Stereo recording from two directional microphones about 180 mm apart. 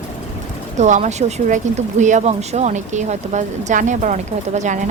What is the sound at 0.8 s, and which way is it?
Speech, 40° right (ahead or behind).